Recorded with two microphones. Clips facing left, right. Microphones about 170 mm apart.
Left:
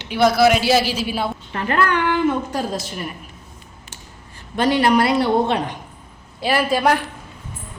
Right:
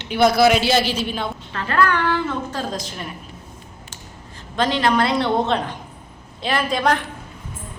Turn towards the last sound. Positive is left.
turn(degrees=10)  # may be behind; listen again after turning